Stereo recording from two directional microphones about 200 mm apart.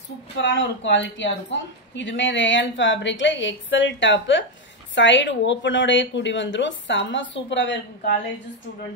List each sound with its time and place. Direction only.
0.4 s a woman's voice: 65° left (ahead or behind)